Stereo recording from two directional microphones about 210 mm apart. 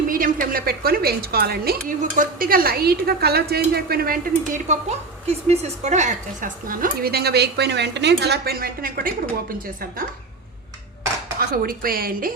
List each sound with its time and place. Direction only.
0.1 s a woman's voice: 40° right (ahead or behind)
11.3 s a woman's voice: 45° right (ahead or behind)